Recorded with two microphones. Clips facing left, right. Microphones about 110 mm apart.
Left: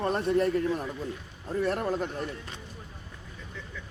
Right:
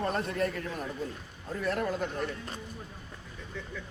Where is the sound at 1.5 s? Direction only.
30° left (ahead or behind).